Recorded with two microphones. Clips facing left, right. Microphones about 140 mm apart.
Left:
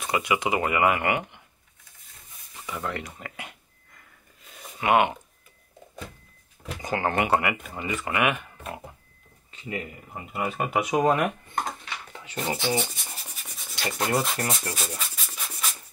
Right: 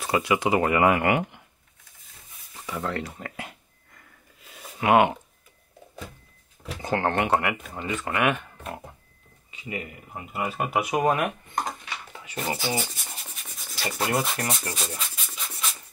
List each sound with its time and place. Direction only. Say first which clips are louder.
0.2 s speech: right 3 dB; 15° left (ahead or behind)
0.7 s speech: right 1 dB; 25° right (ahead or behind)
2.5 s a sound: right 2 dB; 5° right (ahead or behind)
3.2 s speech: right 3 dB; 10° left (ahead or behind)
4.7 s speech: right 2 dB; 30° right (ahead or behind)
6.8 s speech: right 1 dB; 10° left (ahead or behind); by 11.2 s 5° right (ahead or behind)
11.4 s dishes: right 1 dB; 15° right (ahead or behind)
12.4 s rub: left 2 dB; centre (ahead or behind)